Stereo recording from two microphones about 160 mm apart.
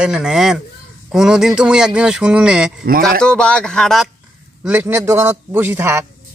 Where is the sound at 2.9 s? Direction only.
65° right (ahead or behind).